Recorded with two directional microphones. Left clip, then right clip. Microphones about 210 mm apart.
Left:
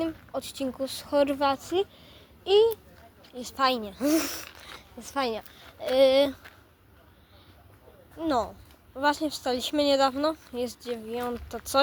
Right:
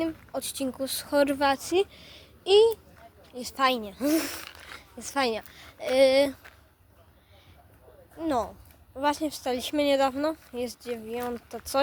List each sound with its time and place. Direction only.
0.0 s speech: 10° right (ahead or behind)
3.3 s speech: 10° right (ahead or behind)
4.6 s speech: 10° right (ahead or behind)
8.2 s speech: centre (ahead or behind)